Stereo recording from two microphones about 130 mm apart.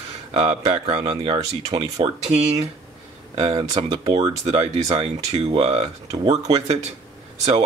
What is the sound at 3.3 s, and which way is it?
Speech, 55° right (ahead or behind).